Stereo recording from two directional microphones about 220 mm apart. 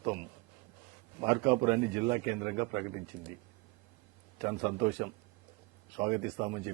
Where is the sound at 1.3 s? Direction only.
15° right (ahead or behind).